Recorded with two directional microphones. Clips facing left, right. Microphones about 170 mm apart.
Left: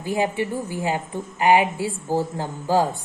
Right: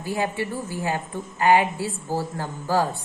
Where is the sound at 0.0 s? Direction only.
15° left (ahead or behind).